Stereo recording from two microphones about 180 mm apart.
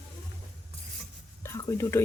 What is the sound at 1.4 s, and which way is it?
Whispering, 15° left (ahead or behind).